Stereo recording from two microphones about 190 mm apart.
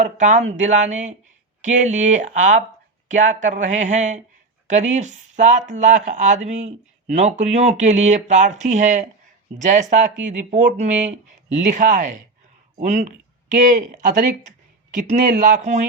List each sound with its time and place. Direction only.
0.0 s speech: 40° right (ahead or behind)